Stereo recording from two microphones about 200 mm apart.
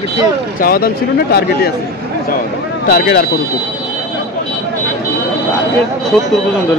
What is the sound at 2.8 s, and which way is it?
Speech, 45° left (ahead or behind).